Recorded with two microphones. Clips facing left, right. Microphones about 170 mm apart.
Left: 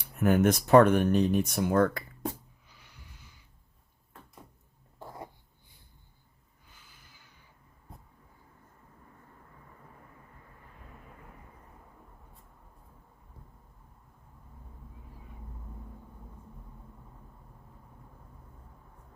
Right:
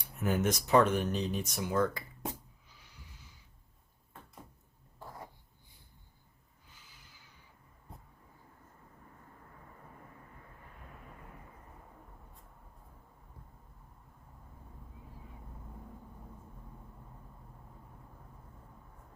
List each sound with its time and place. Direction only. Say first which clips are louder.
0.2 s speech: left 7 dB; 60° left (ahead or behind)
2.7 s snort: left 3 dB; 65° left (ahead or behind)